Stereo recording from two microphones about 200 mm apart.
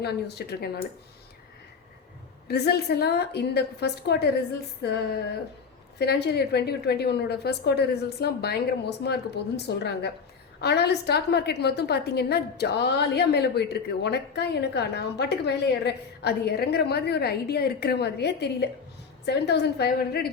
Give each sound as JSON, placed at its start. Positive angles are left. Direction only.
{"t": 0.0, "sound": "speech", "side_deg": 55}
{"t": 2.5, "sound": "a woman's voice", "side_deg": 55}